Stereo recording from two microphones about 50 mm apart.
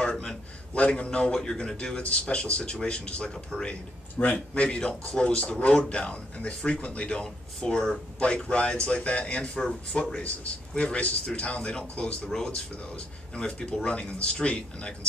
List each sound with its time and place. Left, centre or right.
0.0 s a sound: centre
0.7 s speech: left
4.6 s speech: centre
9.9 s a man's voice: centre
10.8 s speech: left